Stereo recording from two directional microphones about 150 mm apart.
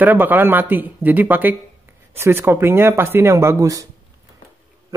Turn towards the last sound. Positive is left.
turn(degrees=-20)  # may be behind; listen again after turning